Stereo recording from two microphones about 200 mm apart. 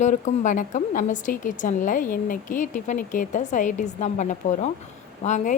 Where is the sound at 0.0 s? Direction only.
35° left (ahead or behind).